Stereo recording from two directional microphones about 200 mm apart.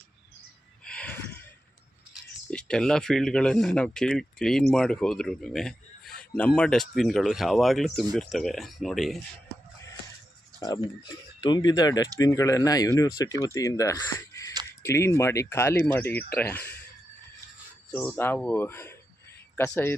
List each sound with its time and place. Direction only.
0.9 s a sound: 5° left (ahead or behind)
2.5 s a man's voice: 5° left (ahead or behind)
10.6 s speech: 15° left (ahead or behind)
17.9 s speech: 10° left (ahead or behind)